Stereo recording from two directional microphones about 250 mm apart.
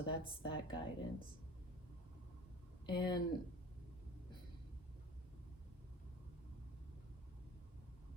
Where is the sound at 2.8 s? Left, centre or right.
Centre.